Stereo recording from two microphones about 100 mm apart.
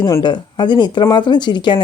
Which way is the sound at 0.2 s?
50° left (ahead or behind).